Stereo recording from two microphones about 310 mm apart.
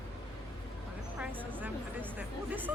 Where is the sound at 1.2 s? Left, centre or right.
Centre.